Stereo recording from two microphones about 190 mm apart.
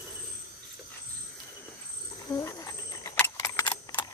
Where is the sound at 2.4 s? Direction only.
15° left (ahead or behind).